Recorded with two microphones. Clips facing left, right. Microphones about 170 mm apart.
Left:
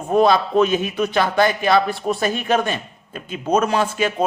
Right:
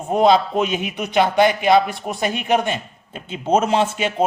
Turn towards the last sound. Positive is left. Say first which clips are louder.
# right 1 dB
turn(degrees=-25)  # may be behind; listen again after turning